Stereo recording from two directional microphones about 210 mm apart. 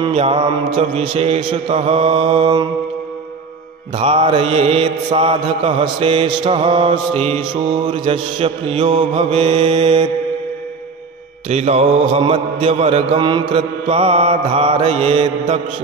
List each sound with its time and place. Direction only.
0.0 s mantra: 25° right (ahead or behind)
3.9 s mantra: 25° right (ahead or behind)
11.4 s mantra: 30° right (ahead or behind)